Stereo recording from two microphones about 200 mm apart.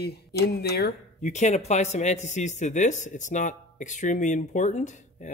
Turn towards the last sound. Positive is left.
turn(degrees=35)  # may be behind; listen again after turning